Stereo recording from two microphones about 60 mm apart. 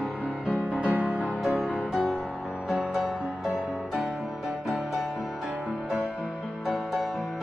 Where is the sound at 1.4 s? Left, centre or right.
Centre.